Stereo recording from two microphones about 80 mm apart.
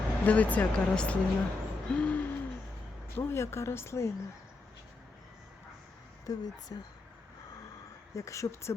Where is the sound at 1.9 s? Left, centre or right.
Centre.